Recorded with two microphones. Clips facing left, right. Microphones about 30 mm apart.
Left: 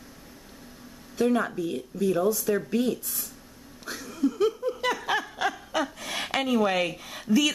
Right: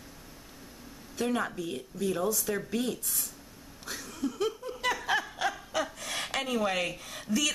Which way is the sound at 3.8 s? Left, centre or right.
Centre.